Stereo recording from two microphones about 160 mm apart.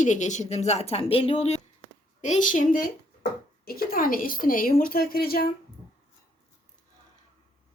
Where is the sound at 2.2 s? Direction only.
50° left (ahead or behind); by 5.4 s 70° left (ahead or behind).